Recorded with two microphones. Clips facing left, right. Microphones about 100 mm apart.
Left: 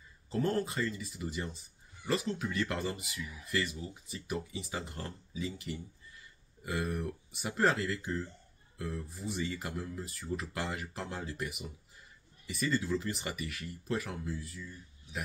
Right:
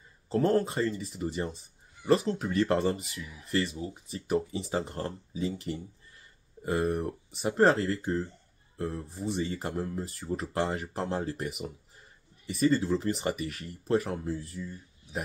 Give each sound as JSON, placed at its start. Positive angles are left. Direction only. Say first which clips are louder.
{"t": 0.3, "sound": "speech", "louder": "right 6 dB", "side_deg": -35}